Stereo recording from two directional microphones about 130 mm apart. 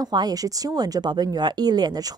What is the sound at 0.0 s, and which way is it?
Speech, 30° right (ahead or behind).